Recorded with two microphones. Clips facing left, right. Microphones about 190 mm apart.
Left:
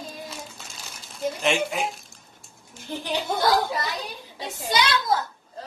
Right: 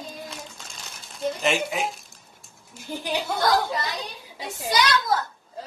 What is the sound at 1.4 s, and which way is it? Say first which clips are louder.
A man's voice: left 1 dB; centre (ahead or behind).